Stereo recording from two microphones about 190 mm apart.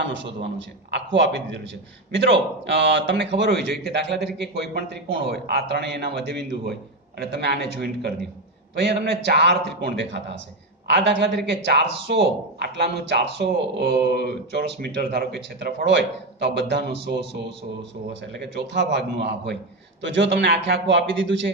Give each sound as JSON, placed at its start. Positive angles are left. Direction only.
{"t": 0.0, "sound": "a man's voice", "side_deg": -70}
{"t": 2.6, "sound": "a man's voice", "side_deg": -70}
{"t": 18.5, "sound": "a man's voice", "side_deg": -65}